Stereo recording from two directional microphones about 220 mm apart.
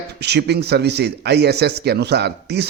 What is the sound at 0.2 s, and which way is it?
A man's voice, 50° right (ahead or behind).